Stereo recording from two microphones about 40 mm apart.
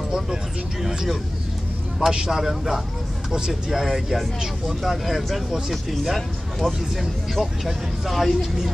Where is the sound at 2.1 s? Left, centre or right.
Right.